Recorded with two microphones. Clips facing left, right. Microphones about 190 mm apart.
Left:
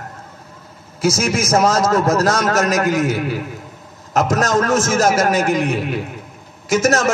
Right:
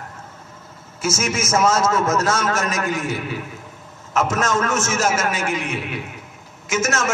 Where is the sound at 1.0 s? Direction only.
35° left (ahead or behind).